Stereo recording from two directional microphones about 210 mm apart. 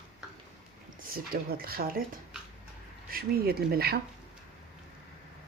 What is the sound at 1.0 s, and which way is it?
Speech, 45° right (ahead or behind).